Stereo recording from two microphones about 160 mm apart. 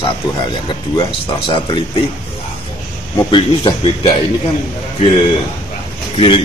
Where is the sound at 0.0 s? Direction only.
30° left (ahead or behind).